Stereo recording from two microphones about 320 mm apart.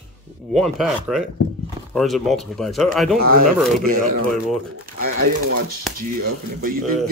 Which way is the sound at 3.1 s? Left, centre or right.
Right.